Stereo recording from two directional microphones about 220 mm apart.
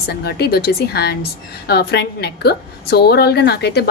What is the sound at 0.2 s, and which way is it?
A woman's voice, 45° left (ahead or behind).